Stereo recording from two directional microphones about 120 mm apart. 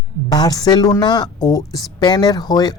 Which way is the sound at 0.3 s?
35° left (ahead or behind).